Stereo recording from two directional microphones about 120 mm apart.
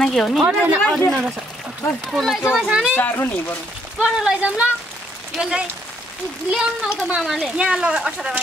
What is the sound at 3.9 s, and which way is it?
Speech, 5° right (ahead or behind).